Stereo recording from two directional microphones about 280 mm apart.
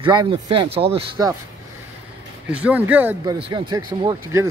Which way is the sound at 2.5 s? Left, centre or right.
Centre.